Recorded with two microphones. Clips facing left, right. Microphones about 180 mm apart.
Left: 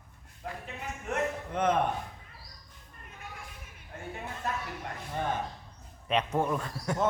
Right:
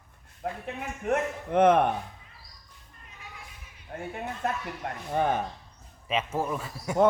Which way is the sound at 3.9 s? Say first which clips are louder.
Right 7 dB; 50° right (ahead or behind).